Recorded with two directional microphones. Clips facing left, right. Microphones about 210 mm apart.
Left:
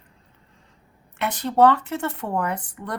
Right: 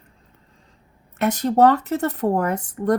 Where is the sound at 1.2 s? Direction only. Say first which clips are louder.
Right 2 dB; 45° right (ahead or behind).